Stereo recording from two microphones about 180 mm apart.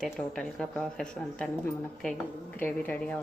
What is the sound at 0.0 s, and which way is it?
A woman's voice, 5° left (ahead or behind).